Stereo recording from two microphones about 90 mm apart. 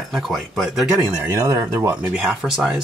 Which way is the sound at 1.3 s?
30° right (ahead or behind).